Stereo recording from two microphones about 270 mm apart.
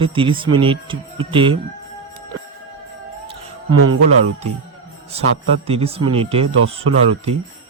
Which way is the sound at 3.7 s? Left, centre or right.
Right.